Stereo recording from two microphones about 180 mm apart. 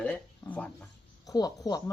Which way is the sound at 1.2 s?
20° left (ahead or behind).